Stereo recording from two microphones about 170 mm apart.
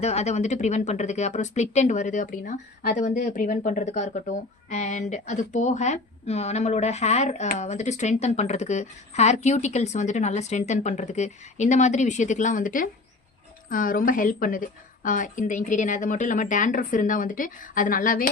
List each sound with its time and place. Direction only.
0.0 s speech: 40° left (ahead or behind)